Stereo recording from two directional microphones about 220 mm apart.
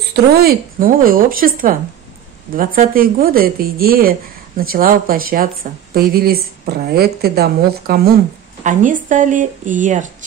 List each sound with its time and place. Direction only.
0.1 s speech: 45° right (ahead or behind)